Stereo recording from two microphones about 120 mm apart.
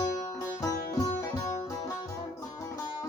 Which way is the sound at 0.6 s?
30° left (ahead or behind).